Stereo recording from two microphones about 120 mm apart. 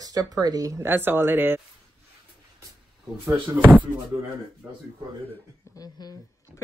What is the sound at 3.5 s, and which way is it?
Speech, 15° right (ahead or behind).